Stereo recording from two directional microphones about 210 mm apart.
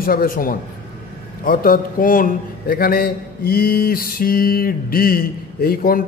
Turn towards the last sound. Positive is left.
turn(degrees=45)  # may be behind; listen again after turning